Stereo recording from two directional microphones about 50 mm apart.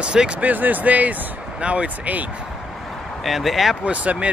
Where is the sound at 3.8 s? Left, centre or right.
Right.